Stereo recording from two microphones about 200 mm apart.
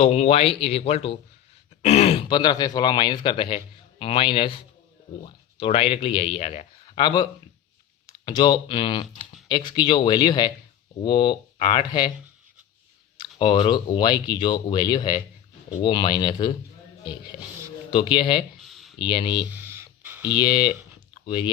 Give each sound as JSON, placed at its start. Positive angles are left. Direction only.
{"t": 0.0, "sound": "speech", "side_deg": 30}
{"t": 13.1, "sound": "speech", "side_deg": 25}
{"t": 17.9, "sound": "speech", "side_deg": 25}
{"t": 18.6, "sound": "a sound", "side_deg": 0}
{"t": 18.9, "sound": "speech", "side_deg": 25}
{"t": 19.5, "sound": "a sound", "side_deg": -10}
{"t": 20.4, "sound": "speech", "side_deg": 20}